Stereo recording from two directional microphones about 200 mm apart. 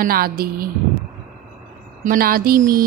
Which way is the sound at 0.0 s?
50° right (ahead or behind).